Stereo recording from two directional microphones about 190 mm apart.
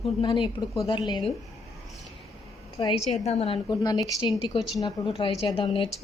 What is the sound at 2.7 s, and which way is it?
A woman's voice, 30° left (ahead or behind).